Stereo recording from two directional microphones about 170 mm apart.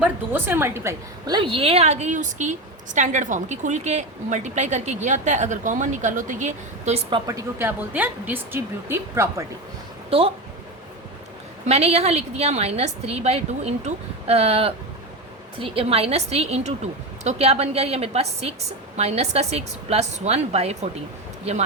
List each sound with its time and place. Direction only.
0.0 s speech: 15° right (ahead or behind)
1.4 s a woman's voice: 30° right (ahead or behind)
7.1 s speech: 20° right (ahead or behind)
10.1 s speech: 35° right (ahead or behind)
11.6 s a woman's voice: 40° right (ahead or behind)